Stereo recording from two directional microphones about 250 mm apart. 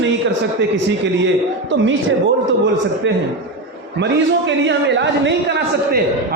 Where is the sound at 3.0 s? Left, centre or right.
Right.